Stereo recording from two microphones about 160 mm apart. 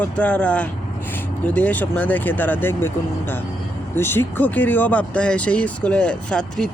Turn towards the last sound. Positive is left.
turn(degrees=5)  # may be behind; listen again after turning